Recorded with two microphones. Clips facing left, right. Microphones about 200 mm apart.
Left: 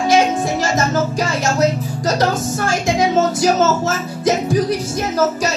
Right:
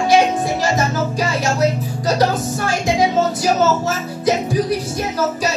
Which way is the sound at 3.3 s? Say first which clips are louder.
Left 1 dB; 45° left (ahead or behind).